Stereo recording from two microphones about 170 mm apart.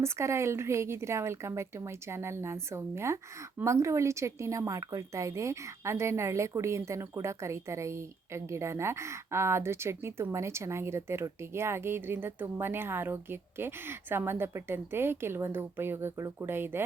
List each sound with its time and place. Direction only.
0.0 s a woman's voice: 15° right (ahead or behind)